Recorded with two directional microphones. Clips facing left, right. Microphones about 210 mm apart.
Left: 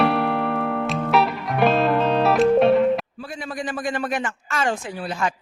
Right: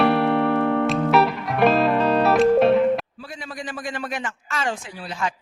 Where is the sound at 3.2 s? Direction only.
50° left (ahead or behind).